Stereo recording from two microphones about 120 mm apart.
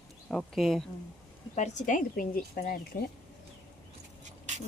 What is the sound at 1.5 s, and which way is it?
Speech, 85° left.